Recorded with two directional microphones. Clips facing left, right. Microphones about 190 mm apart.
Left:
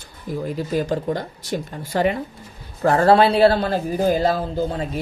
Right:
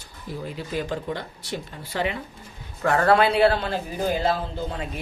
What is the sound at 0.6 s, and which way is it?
Speech, 40° left (ahead or behind).